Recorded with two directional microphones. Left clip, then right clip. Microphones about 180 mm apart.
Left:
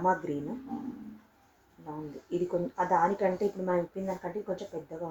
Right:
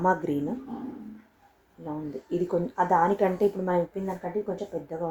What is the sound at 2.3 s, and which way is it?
Speech, 45° right (ahead or behind).